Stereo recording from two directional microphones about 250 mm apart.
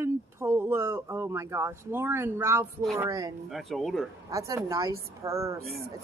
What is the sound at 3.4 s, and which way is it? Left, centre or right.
Speech, centre.